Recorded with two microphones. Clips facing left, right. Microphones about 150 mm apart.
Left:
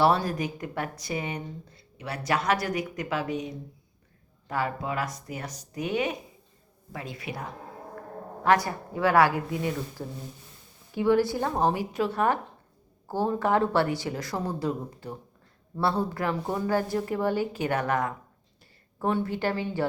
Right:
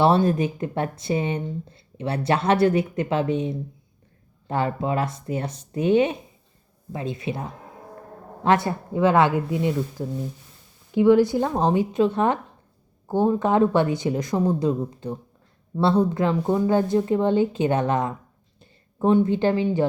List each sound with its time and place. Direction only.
0.0 s speech: 25° right (ahead or behind)
8.4 s speech: 25° right (ahead or behind)
10.0 s speech: 10° right (ahead or behind)